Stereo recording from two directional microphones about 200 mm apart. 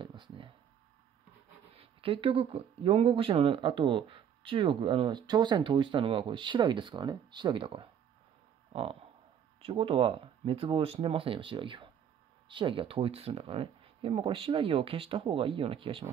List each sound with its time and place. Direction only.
0.0 s a sound: 25° right (ahead or behind)
1.7 s speech: 30° right (ahead or behind)
9.6 s speech: 25° right (ahead or behind)